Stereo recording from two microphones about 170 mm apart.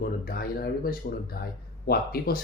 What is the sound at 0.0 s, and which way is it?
Speech, 60° left (ahead or behind).